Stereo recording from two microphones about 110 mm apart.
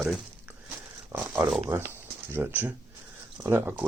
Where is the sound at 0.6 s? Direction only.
20° right (ahead or behind).